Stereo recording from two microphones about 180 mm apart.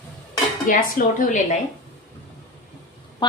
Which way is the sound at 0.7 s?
50° left (ahead or behind).